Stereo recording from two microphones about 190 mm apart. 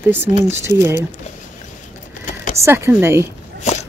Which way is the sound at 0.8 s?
15° right (ahead or behind).